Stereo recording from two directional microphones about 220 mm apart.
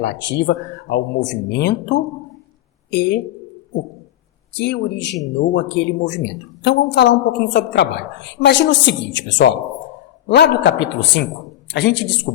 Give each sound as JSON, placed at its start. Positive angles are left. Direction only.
{"t": 0.0, "sound": "speech", "side_deg": 50}
{"t": 4.5, "sound": "speech", "side_deg": 50}